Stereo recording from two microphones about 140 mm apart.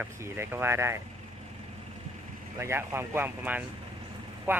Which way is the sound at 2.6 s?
20° right (ahead or behind).